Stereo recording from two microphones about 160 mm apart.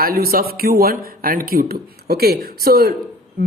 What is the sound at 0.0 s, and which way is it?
A man's voice, 70° right (ahead or behind).